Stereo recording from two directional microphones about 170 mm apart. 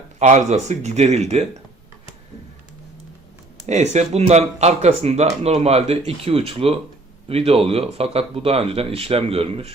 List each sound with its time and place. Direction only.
0.2 s speech: 45° right (ahead or behind)
3.7 s speech: 40° right (ahead or behind)